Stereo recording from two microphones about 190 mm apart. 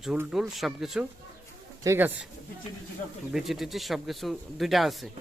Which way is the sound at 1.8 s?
10° right (ahead or behind).